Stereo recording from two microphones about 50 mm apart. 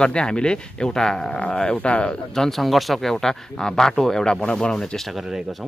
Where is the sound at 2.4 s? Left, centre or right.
Centre.